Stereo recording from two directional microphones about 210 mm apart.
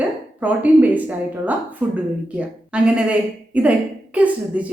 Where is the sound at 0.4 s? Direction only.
5° right (ahead or behind).